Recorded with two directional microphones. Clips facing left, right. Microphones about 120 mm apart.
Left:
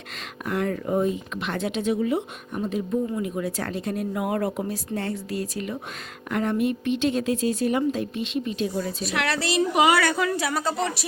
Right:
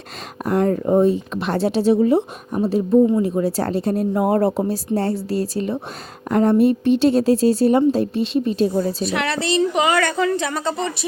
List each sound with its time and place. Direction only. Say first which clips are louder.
0.4 s speech: right 8 dB; 35° right (ahead or behind)
9.0 s a woman's voice: right 4 dB; centre (ahead or behind)